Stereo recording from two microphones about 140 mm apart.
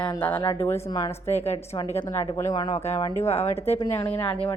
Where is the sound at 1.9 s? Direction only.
15° left (ahead or behind).